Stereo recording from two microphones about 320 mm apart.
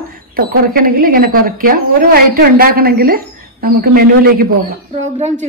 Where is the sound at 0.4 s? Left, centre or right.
Right.